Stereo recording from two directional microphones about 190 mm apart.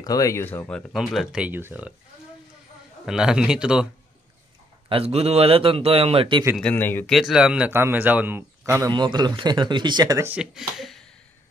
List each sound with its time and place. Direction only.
0.0 s speech: 20° left (ahead or behind); by 2.0 s 10° right (ahead or behind)
3.1 s speech: 5° right (ahead or behind)
4.8 s a man's voice: 30° right (ahead or behind)
6.5 s speech: 10° left (ahead or behind)
7.1 s a man's voice: centre (ahead or behind); by 10.2 s 20° right (ahead or behind)
10.3 s speech: 5° right (ahead or behind)